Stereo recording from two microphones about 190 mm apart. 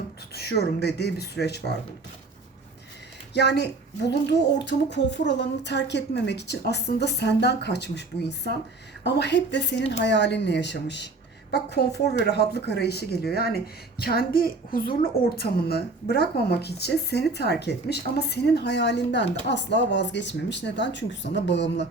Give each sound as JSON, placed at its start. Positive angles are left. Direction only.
{"t": 0.3, "sound": "a woman's voice", "side_deg": 55}
{"t": 3.3, "sound": "a woman's voice", "side_deg": 60}